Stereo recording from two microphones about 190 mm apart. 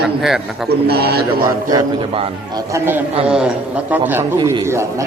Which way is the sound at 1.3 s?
25° right (ahead or behind).